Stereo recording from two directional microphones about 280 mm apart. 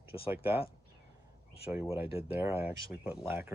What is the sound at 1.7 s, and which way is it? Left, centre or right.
Speech, centre.